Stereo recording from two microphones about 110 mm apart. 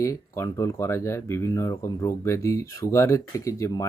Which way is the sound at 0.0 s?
30° left (ahead or behind).